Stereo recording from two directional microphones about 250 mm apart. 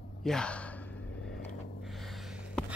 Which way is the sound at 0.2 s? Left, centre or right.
Centre.